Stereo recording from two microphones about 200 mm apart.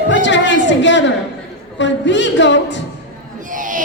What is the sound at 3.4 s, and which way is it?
Owl, 40° right (ahead or behind).